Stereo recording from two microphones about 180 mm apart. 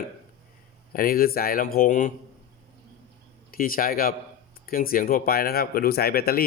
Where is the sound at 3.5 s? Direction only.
50° left (ahead or behind).